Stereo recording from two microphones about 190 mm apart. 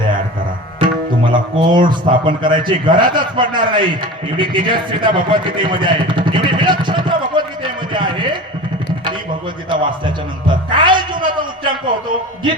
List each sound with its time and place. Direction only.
0.8 s tabla: 25° right (ahead or behind)
1.9 s a man's voice: 25° right (ahead or behind)
9.6 s a man's voice: 25° right (ahead or behind)
10.4 s music: 25° right (ahead or behind)